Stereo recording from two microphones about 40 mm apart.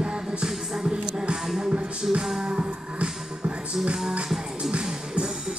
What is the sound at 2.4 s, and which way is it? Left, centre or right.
Music, right.